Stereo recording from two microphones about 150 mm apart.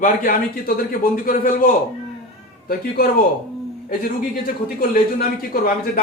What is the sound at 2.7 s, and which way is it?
Speech, 80° left.